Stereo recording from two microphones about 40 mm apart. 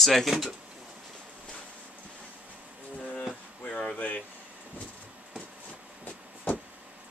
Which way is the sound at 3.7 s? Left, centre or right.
Left.